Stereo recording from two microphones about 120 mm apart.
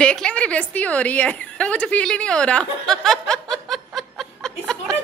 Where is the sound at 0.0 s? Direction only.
5° left (ahead or behind).